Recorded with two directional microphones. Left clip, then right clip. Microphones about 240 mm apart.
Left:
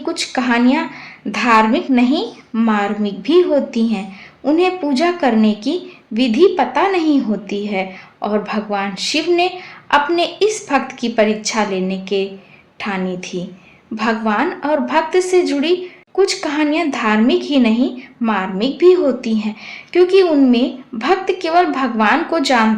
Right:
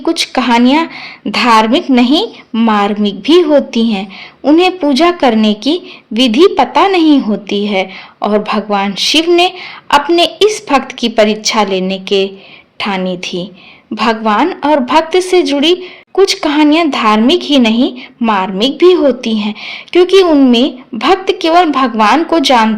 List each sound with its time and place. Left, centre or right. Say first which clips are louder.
0.0 s a woman's voice: right 7 dB; right